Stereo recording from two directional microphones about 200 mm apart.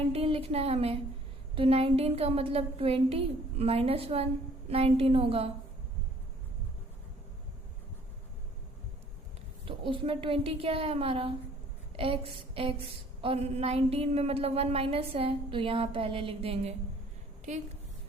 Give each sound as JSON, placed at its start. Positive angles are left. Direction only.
{"t": 0.1, "sound": "a woman's voice", "side_deg": -30}
{"t": 9.6, "sound": "a woman's voice", "side_deg": -25}